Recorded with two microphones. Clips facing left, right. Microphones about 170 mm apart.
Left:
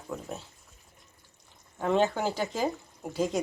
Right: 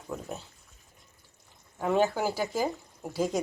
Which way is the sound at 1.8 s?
5° right (ahead or behind).